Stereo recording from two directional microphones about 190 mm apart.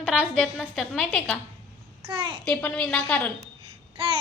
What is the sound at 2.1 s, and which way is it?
Babbling, 25° right (ahead or behind).